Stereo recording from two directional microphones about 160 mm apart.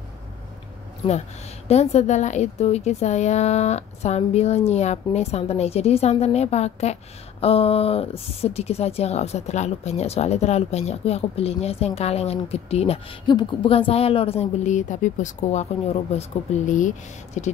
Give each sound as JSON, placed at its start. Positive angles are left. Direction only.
{"t": 1.7, "sound": "a woman's voice", "side_deg": 45}